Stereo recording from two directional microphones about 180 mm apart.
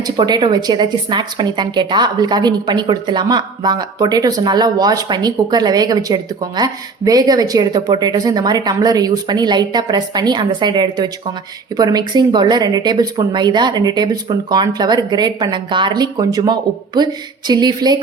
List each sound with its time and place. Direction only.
0.2 s a woman's voice: 25° right (ahead or behind)